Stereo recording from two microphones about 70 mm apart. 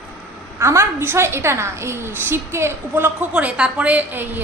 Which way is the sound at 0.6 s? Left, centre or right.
Right.